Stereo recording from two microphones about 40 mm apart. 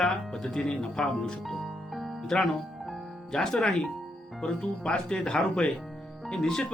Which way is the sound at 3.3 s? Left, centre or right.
Left.